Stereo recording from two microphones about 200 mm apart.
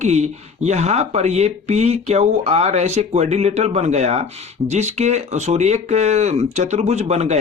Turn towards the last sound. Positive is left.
turn(degrees=-35)  # may be behind; listen again after turning